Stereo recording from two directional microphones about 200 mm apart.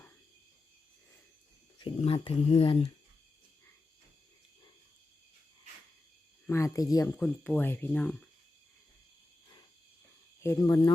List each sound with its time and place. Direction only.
1.8 s speech: 25° left (ahead or behind)
6.5 s speech: 15° left (ahead or behind)
10.4 s speech: 15° left (ahead or behind)